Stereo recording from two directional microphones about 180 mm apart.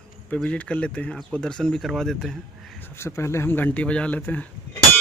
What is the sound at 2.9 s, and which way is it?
Speech, 15° left (ahead or behind).